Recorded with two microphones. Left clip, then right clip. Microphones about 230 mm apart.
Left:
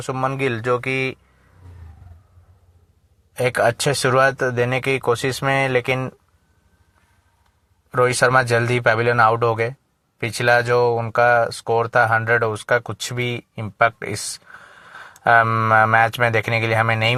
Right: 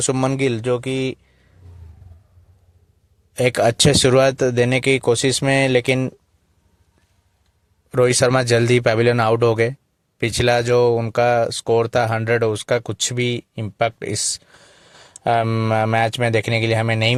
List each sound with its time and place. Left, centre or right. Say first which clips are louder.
0.0 s speech: right 2 dB; right
3.3 s speech: right 2 dB; right
7.9 s speech: right 1 dB; right